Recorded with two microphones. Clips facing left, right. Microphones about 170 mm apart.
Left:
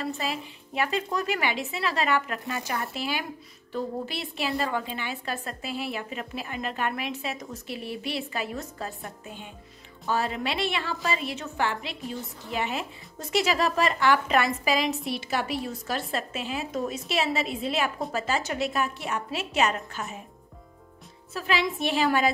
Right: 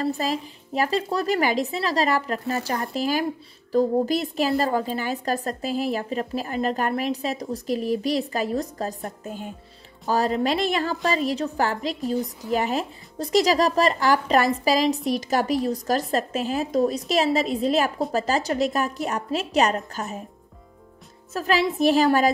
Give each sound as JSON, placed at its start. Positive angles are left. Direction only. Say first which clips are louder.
{"t": 0.0, "sound": "a woman's voice", "louder": "right 6 dB", "side_deg": -40}
{"t": 21.3, "sound": "a woman's voice", "louder": "right 5 dB", "side_deg": -40}